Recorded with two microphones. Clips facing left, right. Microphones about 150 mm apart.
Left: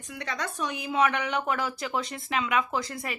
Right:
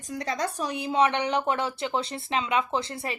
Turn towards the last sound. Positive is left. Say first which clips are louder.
# right 2 dB
turn(degrees=-30)  # may be behind; listen again after turning